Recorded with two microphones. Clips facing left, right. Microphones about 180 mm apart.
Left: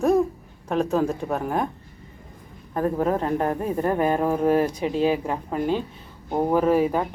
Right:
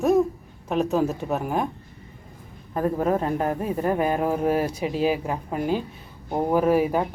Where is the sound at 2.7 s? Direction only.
10° right (ahead or behind).